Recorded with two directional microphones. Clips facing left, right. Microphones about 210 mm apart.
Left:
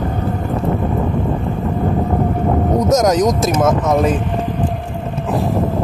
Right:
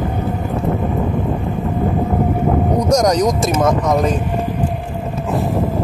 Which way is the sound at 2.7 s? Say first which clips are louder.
Left 2 dB; centre (ahead or behind).